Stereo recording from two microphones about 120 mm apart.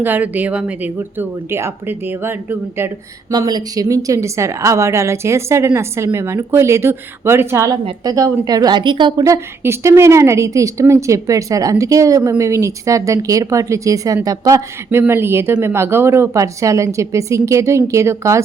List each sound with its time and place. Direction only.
0.0 s speech: 15° right (ahead or behind)
3.3 s a woman's voice: 35° right (ahead or behind)
9.2 s a woman's voice: 25° right (ahead or behind)
14.8 s a woman's voice: 20° right (ahead or behind)